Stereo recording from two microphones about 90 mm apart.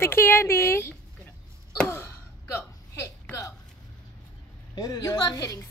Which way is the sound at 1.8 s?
30° left (ahead or behind).